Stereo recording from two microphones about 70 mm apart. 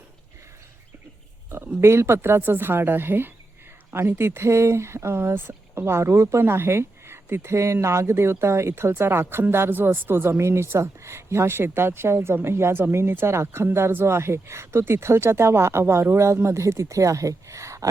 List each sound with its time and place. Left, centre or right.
1.5 s speech: right